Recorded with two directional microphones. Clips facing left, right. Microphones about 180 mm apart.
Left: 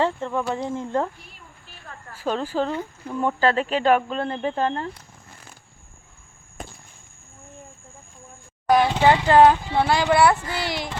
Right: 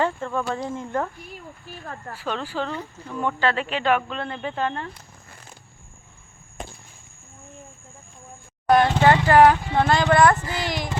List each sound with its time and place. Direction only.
0.0 s speech: 20° left (ahead or behind)
2.1 s speech: 40° left (ahead or behind)
8.7 s speech: centre (ahead or behind)
10.4 s child singing: 20° right (ahead or behind)